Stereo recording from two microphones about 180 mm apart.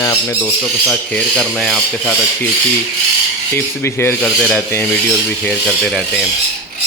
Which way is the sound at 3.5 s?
15° left (ahead or behind).